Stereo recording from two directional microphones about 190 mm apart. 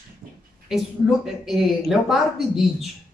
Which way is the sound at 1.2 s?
5° right (ahead or behind).